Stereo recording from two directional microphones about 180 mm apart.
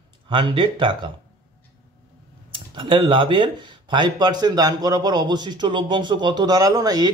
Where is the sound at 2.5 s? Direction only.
30° right (ahead or behind).